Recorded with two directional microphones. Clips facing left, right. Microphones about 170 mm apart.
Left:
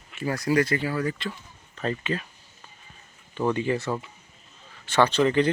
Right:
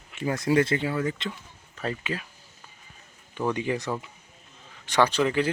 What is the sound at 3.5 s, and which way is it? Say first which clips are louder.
Speech: left 2 dB; 15° right (ahead or behind).